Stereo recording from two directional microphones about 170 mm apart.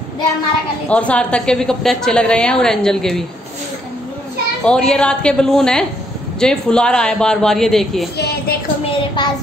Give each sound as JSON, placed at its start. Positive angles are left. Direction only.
{"t": 0.8, "sound": "a woman's voice", "side_deg": 5}
{"t": 4.6, "sound": "a woman's voice", "side_deg": 5}
{"t": 8.2, "sound": "speech", "side_deg": 65}
{"t": 8.8, "sound": "a sound", "side_deg": 25}